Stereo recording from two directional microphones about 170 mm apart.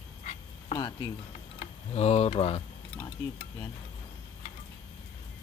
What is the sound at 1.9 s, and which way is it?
Speech, 40° left (ahead or behind).